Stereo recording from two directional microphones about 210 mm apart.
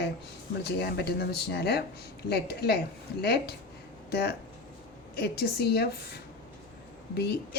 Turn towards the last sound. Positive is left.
turn(degrees=50)  # may be behind; listen again after turning